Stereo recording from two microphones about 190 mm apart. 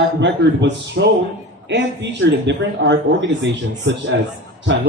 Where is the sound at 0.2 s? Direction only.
65° right (ahead or behind).